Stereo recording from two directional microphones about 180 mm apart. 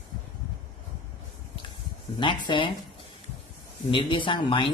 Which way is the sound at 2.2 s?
25° left (ahead or behind).